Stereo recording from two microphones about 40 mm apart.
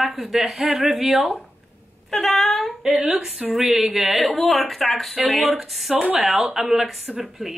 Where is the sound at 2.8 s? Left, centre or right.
Centre.